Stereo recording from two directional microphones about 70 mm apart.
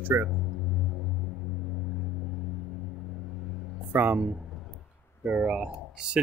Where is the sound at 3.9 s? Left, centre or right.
Right.